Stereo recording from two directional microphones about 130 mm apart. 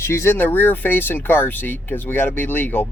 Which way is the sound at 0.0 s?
20° left (ahead or behind).